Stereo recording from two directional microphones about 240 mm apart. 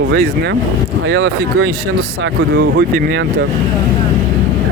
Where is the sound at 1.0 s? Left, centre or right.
Right.